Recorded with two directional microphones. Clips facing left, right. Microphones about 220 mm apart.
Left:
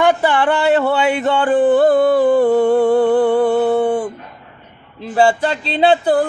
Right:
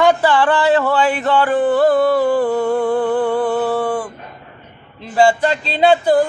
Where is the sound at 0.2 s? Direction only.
20° left (ahead or behind).